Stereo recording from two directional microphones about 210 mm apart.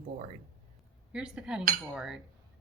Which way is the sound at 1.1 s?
5° right (ahead or behind).